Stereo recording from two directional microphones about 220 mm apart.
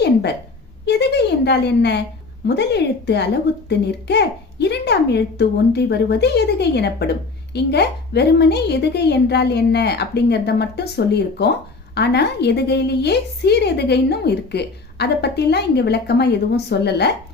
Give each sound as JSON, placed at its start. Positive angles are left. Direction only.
{"t": 0.0, "sound": "a woman's voice", "side_deg": 50}